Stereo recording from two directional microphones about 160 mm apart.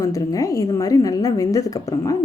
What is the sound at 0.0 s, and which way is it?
A woman's voice, 20° left (ahead or behind).